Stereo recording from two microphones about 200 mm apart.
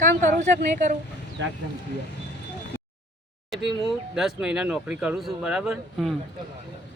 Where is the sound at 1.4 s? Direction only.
70° right (ahead or behind).